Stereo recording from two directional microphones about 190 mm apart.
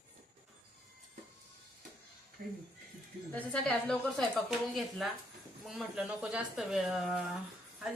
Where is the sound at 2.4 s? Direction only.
50° right (ahead or behind).